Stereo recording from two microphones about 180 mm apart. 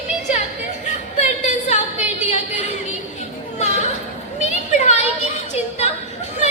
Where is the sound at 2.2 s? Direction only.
40° left (ahead or behind).